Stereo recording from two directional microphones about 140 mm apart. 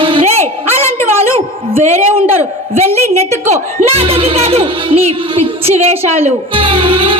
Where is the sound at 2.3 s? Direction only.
50° right (ahead or behind).